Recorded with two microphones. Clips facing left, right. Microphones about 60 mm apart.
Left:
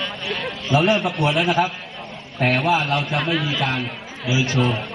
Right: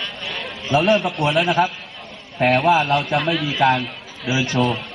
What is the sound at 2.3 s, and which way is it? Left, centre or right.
A man's voice, centre.